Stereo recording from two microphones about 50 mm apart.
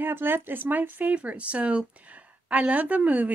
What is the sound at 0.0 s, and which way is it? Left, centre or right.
A woman's voice, right.